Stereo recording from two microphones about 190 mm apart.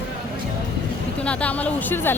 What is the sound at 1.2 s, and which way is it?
Speech, 5° left (ahead or behind).